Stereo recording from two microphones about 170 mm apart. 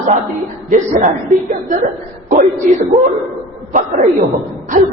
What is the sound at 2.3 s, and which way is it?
Speech, 45° right (ahead or behind).